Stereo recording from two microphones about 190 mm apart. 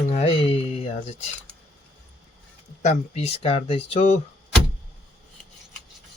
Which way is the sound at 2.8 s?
35° left (ahead or behind).